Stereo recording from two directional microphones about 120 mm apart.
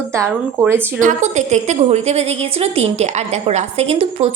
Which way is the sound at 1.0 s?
85° right.